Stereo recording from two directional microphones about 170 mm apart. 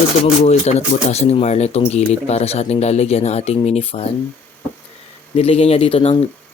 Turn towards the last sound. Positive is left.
turn(degrees=35)  # may be behind; listen again after turning